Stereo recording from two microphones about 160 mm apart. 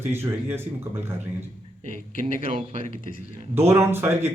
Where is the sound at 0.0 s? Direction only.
15° right (ahead or behind).